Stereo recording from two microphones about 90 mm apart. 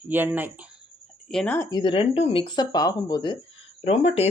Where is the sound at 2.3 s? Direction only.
60° left (ahead or behind).